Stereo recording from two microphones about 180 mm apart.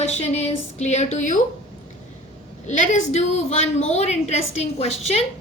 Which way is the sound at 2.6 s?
45° left (ahead or behind).